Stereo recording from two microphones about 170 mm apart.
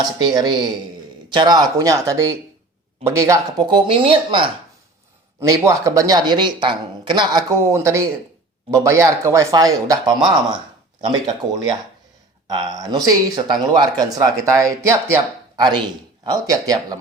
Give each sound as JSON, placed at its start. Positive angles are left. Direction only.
{"t": 0.0, "sound": "speech", "side_deg": -25}
{"t": 3.8, "sound": "speech", "side_deg": -35}
{"t": 5.4, "sound": "speech", "side_deg": -20}